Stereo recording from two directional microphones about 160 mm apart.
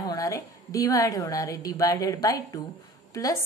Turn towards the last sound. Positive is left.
turn(degrees=20)  # may be behind; listen again after turning